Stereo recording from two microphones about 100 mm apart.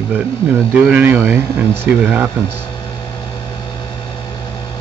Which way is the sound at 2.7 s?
50° left (ahead or behind).